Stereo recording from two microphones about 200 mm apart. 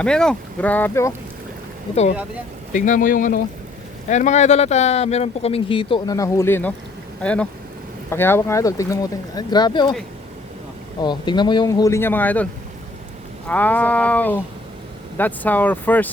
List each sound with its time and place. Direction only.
0.0 s speech: 5° left (ahead or behind)
2.7 s speech: 40° left (ahead or behind); by 9.9 s 20° left (ahead or behind)
11.0 s speech: 20° left (ahead or behind)
13.5 s speech: 10° left (ahead or behind)